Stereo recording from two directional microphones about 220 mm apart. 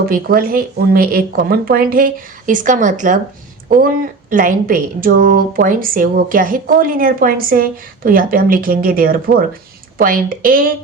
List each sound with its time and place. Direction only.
0.0 s a woman's voice: 40° right (ahead or behind)